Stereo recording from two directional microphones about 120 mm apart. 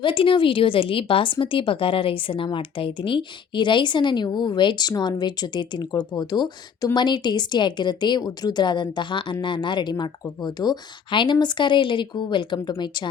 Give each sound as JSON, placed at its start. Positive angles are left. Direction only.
{"t": 0.0, "sound": "a woman's voice", "side_deg": 45}